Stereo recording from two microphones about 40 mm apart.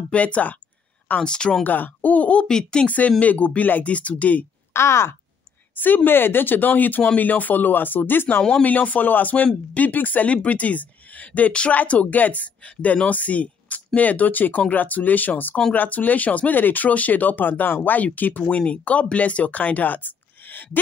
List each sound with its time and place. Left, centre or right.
0.1 s speech: left
1.2 s speech: left
1.6 s speech: left
2.4 s a woman's voice: centre
3.1 s speech: left
5.8 s speech: left
8.4 s speech: centre
8.6 s speech: left